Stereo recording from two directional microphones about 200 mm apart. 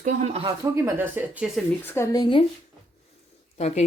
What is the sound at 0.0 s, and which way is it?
Speech, 40° right (ahead or behind).